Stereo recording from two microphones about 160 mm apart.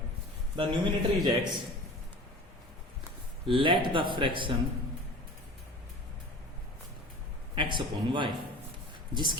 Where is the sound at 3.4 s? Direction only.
30° right (ahead or behind).